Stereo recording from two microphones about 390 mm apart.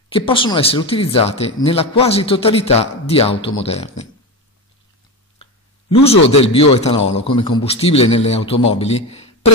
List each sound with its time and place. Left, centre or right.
0.1 s speech: centre
5.4 s a sound: centre
6.4 s a man's voice: centre